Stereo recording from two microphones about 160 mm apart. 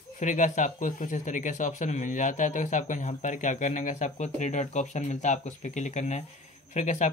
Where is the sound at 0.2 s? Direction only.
50° left (ahead or behind).